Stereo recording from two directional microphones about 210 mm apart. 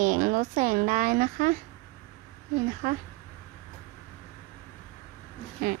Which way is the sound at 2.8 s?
40° right (ahead or behind).